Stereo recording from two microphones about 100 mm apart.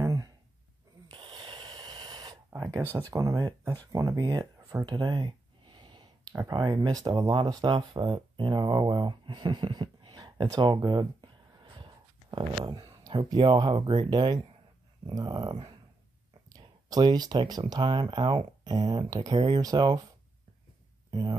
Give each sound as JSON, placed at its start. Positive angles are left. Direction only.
{"t": 0.0, "sound": "a sound", "side_deg": -35}
{"t": 1.1, "sound": "snort", "side_deg": -50}
{"t": 3.0, "sound": "speech", "side_deg": -35}
{"t": 4.8, "sound": "a sound", "side_deg": -45}
{"t": 6.4, "sound": "speech", "side_deg": -45}
{"t": 7.6, "sound": "speech", "side_deg": -50}
{"t": 12.6, "sound": "speech", "side_deg": -40}
{"t": 21.1, "sound": "speech", "side_deg": -45}